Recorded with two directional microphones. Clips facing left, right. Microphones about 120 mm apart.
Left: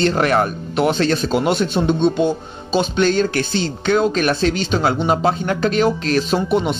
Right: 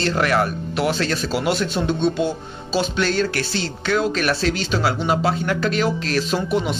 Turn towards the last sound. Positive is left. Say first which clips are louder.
# left 4 dB
turn(degrees=25)  # may be behind; listen again after turning